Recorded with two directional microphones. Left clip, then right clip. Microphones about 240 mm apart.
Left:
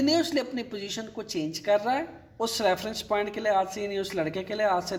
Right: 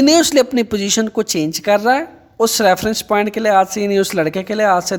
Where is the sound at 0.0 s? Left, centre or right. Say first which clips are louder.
Right 14 dB; right.